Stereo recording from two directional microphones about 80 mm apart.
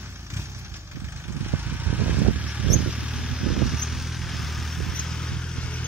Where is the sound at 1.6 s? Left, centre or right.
Centre.